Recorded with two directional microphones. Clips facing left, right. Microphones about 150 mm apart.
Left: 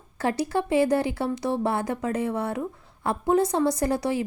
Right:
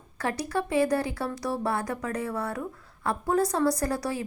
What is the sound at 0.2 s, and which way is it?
A woman's voice, 30° left (ahead or behind).